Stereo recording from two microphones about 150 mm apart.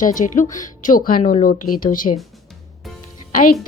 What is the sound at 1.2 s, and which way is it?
Speech, 45° left (ahead or behind).